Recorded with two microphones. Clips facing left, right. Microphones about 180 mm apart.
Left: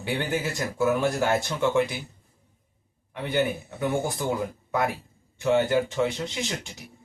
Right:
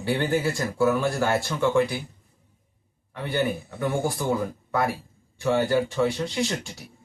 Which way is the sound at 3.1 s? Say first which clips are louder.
Even; 20° left (ahead or behind).